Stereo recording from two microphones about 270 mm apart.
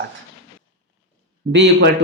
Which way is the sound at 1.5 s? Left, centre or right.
Right.